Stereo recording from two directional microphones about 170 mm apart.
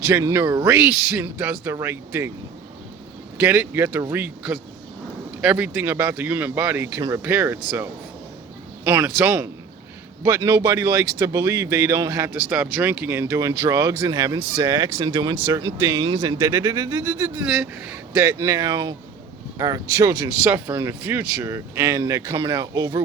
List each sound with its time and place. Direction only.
0.1 s speech: 15° right (ahead or behind)
3.4 s speech: 10° right (ahead or behind)